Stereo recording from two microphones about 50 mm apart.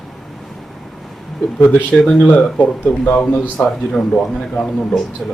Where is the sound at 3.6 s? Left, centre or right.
Centre.